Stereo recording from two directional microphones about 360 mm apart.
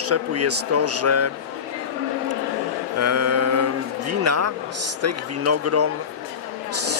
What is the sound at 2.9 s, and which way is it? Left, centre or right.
Mantra, right.